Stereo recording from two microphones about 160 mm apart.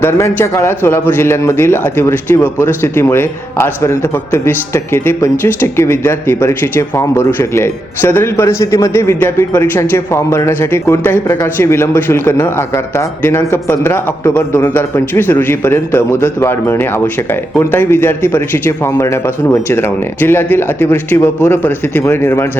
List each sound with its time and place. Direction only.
0.0 s a man's voice: 15° left (ahead or behind)